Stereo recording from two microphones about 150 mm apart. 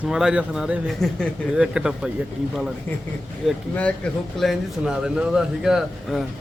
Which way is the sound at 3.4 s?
Centre (ahead or behind).